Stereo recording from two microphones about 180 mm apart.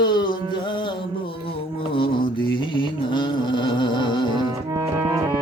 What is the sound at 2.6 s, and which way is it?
Music, 30° left (ahead or behind).